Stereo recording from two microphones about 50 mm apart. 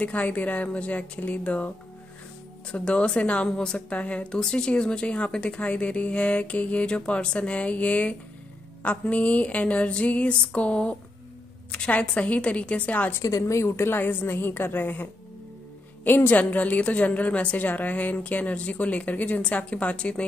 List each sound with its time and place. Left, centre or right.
0.0 s speech: left
2.7 s speech: left
13.2 s a woman's voice: left
13.7 s a woman's voice: left
16.3 s a woman's voice: left